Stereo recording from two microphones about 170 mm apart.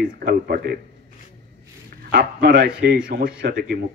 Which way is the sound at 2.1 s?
80° right.